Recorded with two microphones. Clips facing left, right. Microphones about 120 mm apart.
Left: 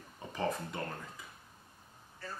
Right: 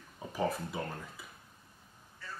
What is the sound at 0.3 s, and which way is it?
Speech, 10° right (ahead or behind).